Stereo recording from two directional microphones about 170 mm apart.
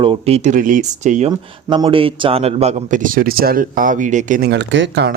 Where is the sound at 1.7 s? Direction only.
30° right (ahead or behind); by 4.5 s 50° right (ahead or behind).